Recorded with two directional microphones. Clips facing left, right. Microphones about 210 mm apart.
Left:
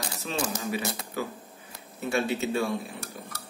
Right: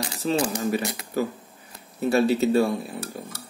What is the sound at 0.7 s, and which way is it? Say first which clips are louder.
Speech: right 5 dB; 45° right (ahead or behind).